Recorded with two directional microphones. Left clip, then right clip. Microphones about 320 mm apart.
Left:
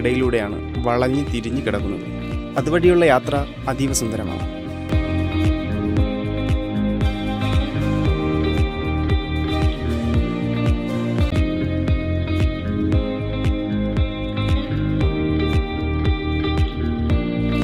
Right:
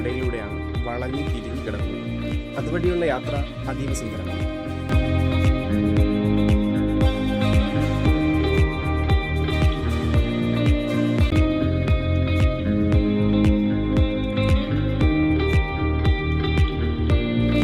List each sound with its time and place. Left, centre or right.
0.0 s speech: left
2.7 s speech: left
14.9 s music: centre